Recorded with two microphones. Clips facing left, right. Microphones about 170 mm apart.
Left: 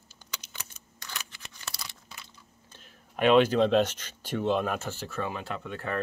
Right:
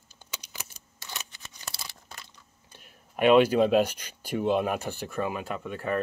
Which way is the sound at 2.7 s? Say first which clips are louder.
Right 1 dB; 10° right (ahead or behind).